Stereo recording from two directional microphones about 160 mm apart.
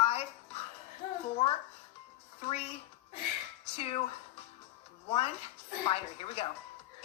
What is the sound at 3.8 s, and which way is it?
Speech, 40° left (ahead or behind).